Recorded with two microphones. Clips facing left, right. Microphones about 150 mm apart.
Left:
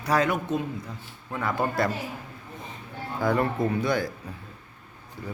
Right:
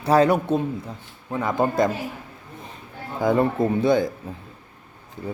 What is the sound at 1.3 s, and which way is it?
Speech, 20° right (ahead or behind).